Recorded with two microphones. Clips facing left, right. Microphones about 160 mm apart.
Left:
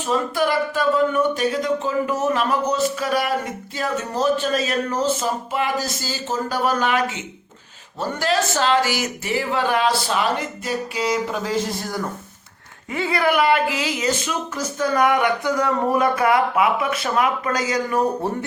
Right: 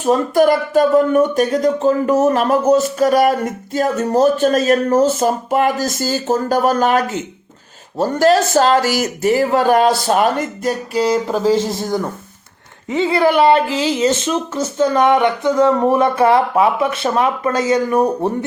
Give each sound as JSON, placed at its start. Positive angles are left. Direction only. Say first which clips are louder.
{"t": 0.0, "sound": "speech", "louder": "right 8 dB", "side_deg": -45}
{"t": 12.9, "sound": "speech", "louder": "right 6 dB", "side_deg": -25}